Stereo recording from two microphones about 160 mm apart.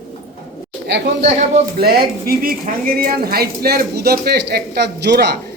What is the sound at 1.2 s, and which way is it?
Speech, 45° right (ahead or behind).